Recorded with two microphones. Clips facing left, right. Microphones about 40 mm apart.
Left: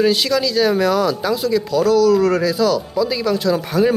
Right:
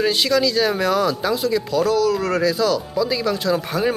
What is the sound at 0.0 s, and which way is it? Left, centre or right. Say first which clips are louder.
Speech: left 2 dB; centre.